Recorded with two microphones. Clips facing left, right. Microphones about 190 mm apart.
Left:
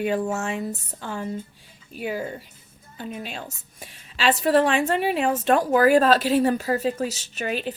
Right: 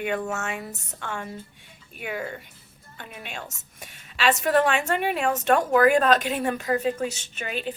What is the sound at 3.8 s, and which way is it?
A woman's voice, 30° left (ahead or behind).